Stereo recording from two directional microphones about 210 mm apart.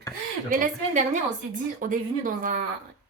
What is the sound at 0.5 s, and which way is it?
Speech, 35° right (ahead or behind).